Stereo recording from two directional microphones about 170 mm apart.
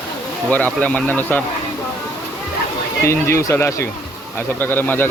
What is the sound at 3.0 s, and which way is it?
A man's voice, 15° left (ahead or behind).